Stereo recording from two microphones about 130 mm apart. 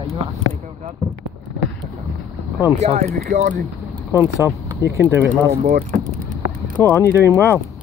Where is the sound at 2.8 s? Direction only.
55° right (ahead or behind).